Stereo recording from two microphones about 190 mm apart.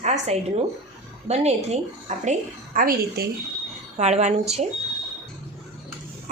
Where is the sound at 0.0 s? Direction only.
35° right (ahead or behind).